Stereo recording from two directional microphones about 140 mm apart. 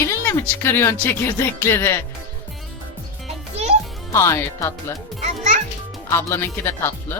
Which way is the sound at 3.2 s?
50° right (ahead or behind).